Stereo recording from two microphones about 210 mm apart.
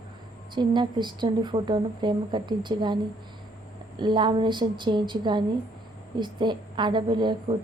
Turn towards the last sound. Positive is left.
turn(degrees=-20)  # may be behind; listen again after turning